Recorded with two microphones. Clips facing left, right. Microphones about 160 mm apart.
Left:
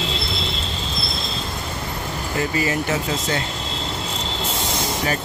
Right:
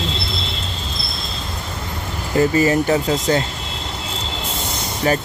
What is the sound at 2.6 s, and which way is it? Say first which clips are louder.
Speech: right 6 dB; 40° right (ahead or behind).